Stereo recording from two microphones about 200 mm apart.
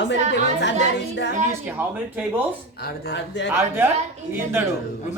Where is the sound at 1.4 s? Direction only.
5° right (ahead or behind).